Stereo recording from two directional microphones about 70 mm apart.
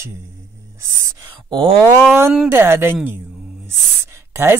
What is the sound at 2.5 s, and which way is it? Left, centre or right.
Speech, right.